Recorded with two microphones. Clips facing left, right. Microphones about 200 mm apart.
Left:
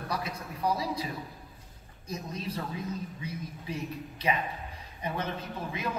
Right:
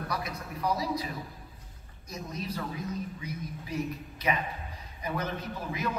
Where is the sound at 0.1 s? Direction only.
30° left (ahead or behind).